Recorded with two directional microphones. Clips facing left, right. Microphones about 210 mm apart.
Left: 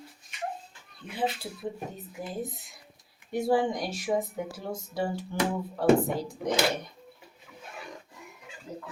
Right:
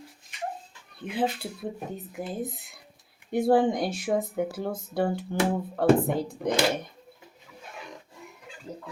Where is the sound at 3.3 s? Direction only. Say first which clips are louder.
Right 4 dB; 55° right (ahead or behind).